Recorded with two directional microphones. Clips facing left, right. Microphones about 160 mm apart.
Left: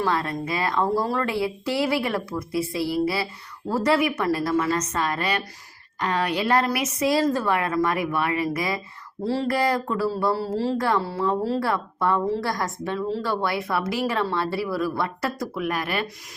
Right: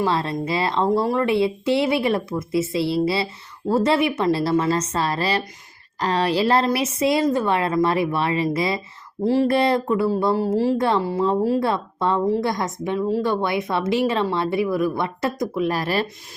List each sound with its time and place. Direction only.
0.0 s speech: 25° right (ahead or behind)
15.7 s speech: 35° right (ahead or behind)